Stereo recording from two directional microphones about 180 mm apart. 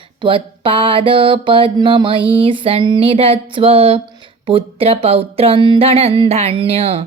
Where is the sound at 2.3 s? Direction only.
30° right (ahead or behind).